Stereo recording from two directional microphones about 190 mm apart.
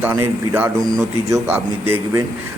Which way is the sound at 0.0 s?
10° right (ahead or behind).